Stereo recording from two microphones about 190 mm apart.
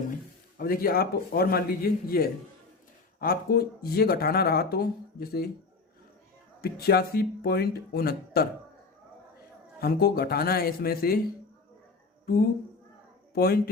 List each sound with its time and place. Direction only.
0.6 s speech: 50° left (ahead or behind)
6.6 s speech: 55° left (ahead or behind)
9.8 s speech: 55° left (ahead or behind)
13.3 s speech: 55° left (ahead or behind)